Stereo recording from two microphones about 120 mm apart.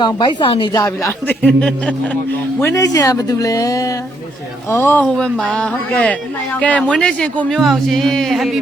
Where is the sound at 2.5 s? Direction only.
25° left (ahead or behind).